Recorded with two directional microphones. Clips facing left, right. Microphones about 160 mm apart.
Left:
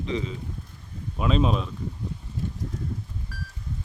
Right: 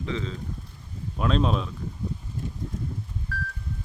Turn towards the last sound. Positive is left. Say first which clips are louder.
# right 5 dB
turn(degrees=10)  # may be behind; listen again after turning